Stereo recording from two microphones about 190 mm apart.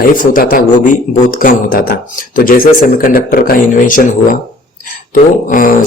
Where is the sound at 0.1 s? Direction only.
45° left (ahead or behind).